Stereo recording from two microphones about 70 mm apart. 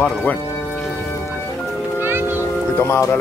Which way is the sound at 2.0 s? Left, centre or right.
Right.